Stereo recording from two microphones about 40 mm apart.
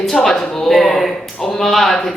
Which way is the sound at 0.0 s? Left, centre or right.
Centre.